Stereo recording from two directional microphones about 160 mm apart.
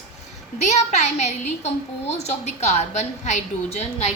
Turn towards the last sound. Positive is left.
turn(degrees=45)  # may be behind; listen again after turning